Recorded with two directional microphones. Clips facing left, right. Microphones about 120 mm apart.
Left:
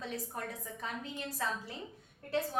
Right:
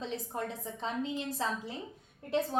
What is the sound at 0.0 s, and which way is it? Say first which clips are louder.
A woman's voice: right 3 dB; 25° right (ahead or behind).